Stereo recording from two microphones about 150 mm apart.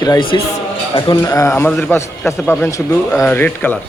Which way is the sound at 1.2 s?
20° left (ahead or behind).